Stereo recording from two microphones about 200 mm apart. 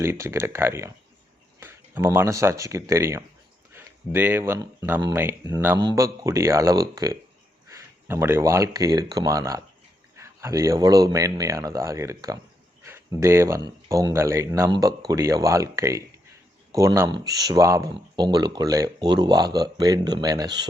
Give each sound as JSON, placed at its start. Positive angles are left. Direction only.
{"t": 0.0, "sound": "speech", "side_deg": -15}
{"t": 12.8, "sound": "a sound", "side_deg": -15}
{"t": 13.7, "sound": "speech", "side_deg": -20}